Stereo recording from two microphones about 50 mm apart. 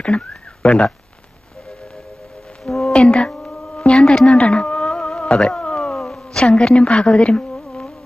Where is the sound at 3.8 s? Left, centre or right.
Left.